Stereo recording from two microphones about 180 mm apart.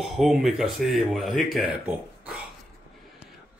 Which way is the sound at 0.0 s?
Centre (ahead or behind).